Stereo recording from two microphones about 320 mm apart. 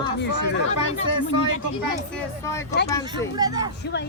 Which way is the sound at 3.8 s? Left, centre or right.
Left.